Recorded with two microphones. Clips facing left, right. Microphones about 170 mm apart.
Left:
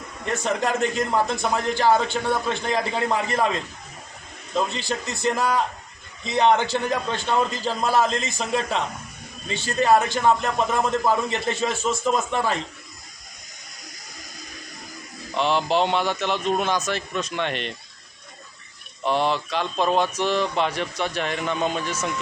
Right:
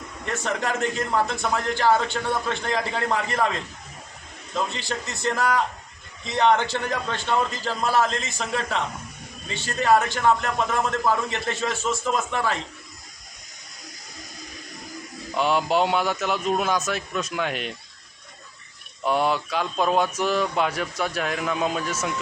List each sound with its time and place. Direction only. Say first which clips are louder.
0.3 s a man's voice: left 3 dB; 15° left (ahead or behind)
15.4 s speech: even; 5° right (ahead or behind)
19.0 s speech: even; centre (ahead or behind)